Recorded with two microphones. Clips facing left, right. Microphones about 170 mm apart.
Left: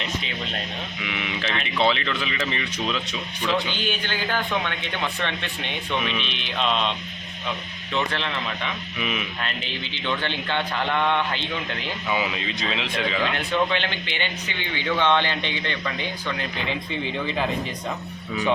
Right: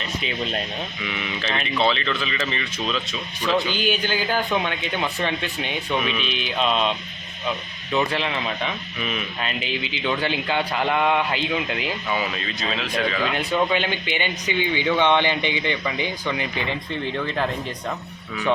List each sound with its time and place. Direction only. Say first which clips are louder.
1.0 s speech: left 1 dB; 10° left (ahead or behind)
3.4 s speech: right 3 dB; 10° right (ahead or behind)
7.9 s speech: right 4 dB; 10° right (ahead or behind)
9.4 s speech: right 4 dB; 10° right (ahead or behind)
12.0 s speech: even; 10° left (ahead or behind)
13.2 s speech: right 1 dB; 10° right (ahead or behind)